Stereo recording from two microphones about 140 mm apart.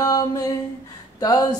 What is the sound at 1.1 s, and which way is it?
Speech, 25° left (ahead or behind).